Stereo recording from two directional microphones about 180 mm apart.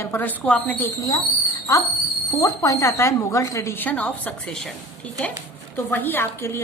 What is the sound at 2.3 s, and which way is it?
A woman's voice, 20° left (ahead or behind).